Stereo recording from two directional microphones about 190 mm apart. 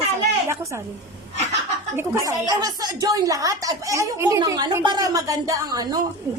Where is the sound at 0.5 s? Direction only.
15° right (ahead or behind).